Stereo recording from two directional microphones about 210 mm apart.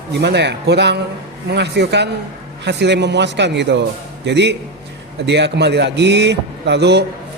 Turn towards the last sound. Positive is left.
turn(degrees=-55)  # may be behind; listen again after turning